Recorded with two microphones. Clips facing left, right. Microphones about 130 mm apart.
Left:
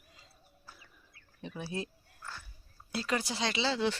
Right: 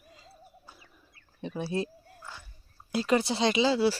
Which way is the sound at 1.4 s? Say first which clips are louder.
Right 7 dB; 30° right (ahead or behind).